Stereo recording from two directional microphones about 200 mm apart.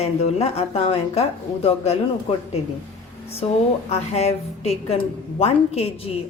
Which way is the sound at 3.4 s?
30° left (ahead or behind).